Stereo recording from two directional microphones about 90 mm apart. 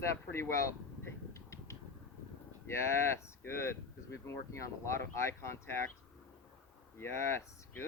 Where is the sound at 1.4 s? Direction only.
35° left (ahead or behind).